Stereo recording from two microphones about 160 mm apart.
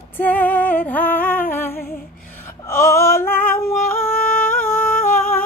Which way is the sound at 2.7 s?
15° left (ahead or behind).